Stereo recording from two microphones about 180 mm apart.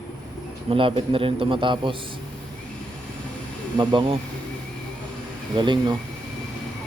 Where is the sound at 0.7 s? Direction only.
30° right (ahead or behind).